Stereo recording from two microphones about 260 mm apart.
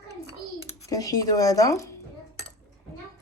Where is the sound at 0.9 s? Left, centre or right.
Centre.